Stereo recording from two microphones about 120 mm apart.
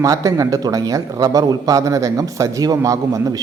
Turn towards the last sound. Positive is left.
turn(degrees=-30)  # may be behind; listen again after turning